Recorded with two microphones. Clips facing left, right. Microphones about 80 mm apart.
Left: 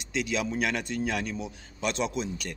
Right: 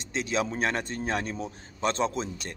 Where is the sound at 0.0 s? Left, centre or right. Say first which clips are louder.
Right 1 dB; right.